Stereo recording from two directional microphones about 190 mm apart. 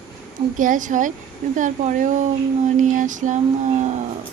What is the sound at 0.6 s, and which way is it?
Speech, 45° right (ahead or behind).